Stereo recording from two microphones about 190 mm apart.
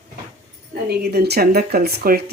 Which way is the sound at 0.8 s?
60° right (ahead or behind).